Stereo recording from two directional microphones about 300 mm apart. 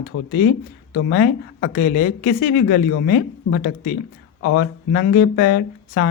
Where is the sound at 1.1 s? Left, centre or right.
Left.